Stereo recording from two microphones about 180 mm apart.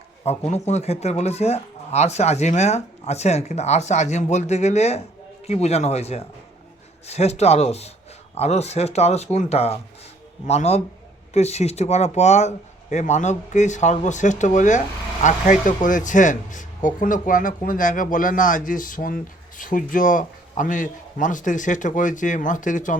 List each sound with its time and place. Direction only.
0.3 s speech: 40° left (ahead or behind)